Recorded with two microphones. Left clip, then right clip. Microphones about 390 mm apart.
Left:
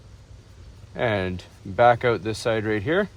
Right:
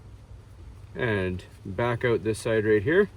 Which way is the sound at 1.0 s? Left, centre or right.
Centre.